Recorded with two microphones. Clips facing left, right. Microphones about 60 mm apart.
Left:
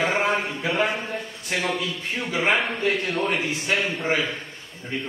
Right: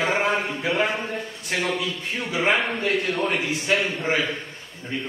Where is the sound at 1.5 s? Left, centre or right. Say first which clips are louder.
Even; centre.